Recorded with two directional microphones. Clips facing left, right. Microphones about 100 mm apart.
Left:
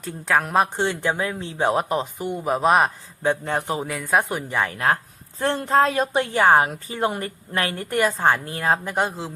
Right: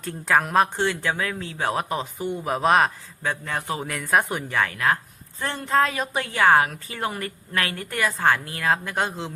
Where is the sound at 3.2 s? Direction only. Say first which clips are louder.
Left 5 dB; 30° left (ahead or behind).